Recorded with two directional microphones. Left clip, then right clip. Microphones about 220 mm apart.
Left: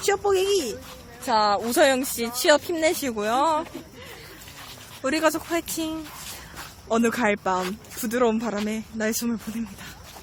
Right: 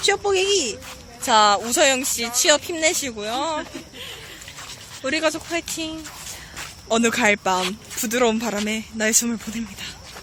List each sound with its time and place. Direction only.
0.0 s speech: 5° left (ahead or behind)
1.7 s speech: 20° left (ahead or behind)
5.0 s speech: 15° left (ahead or behind)
6.8 s speech: centre (ahead or behind)